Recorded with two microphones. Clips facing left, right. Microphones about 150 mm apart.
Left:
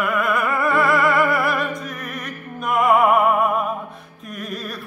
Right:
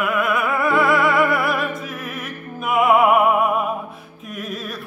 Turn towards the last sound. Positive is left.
turn(degrees=0)  # may be behind; listen again after turning